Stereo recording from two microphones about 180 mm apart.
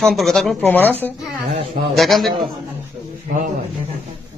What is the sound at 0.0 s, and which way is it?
Speech, centre (ahead or behind).